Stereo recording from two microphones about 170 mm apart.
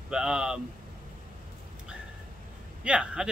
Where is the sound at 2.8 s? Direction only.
5° right (ahead or behind).